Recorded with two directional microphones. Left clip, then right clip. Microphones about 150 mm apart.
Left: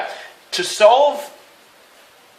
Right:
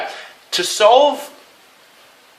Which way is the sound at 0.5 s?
30° right (ahead or behind).